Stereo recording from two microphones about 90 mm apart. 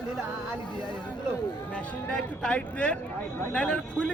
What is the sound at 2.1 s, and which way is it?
Speech, 15° left (ahead or behind).